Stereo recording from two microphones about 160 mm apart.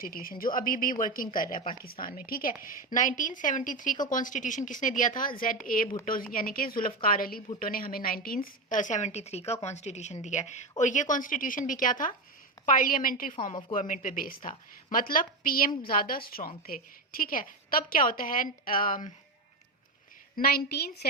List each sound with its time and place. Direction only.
0.0 s a woman's voice: 65° left (ahead or behind)
20.3 s a woman's voice: 70° left (ahead or behind)